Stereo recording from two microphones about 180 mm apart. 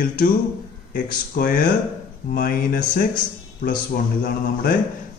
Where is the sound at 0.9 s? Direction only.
50° left (ahead or behind).